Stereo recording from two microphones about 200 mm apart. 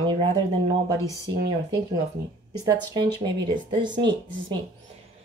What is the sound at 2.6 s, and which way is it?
Speech, 20° right (ahead or behind).